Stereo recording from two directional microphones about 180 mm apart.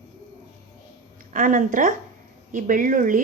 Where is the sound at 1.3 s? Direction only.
45° right (ahead or behind).